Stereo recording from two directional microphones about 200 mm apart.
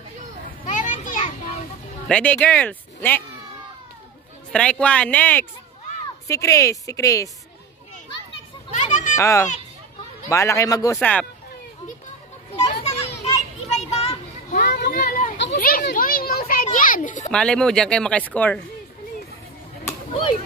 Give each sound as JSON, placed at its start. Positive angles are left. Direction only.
{"t": 0.7, "sound": "children playing", "side_deg": 40}
{"t": 2.0, "sound": "speech", "side_deg": 5}
{"t": 4.5, "sound": "speech", "side_deg": 5}
{"t": 8.7, "sound": "a sound", "side_deg": 35}
{"t": 9.1, "sound": "a child's voice", "side_deg": 15}
{"t": 11.0, "sound": "speech", "side_deg": 5}
{"t": 12.5, "sound": "children playing", "side_deg": 30}
{"t": 14.6, "sound": "a sound", "side_deg": 50}
{"t": 17.3, "sound": "speech", "side_deg": 5}